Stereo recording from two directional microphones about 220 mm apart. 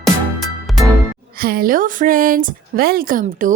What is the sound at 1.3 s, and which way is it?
A woman's voice, 40° right (ahead or behind).